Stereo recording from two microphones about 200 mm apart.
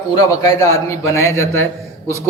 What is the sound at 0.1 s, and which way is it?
A man's voice, 20° left (ahead or behind).